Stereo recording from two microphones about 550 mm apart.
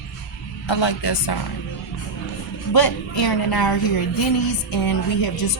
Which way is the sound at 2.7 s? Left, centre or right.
Left.